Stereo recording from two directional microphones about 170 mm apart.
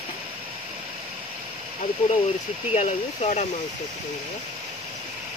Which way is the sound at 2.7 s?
40° left (ahead or behind).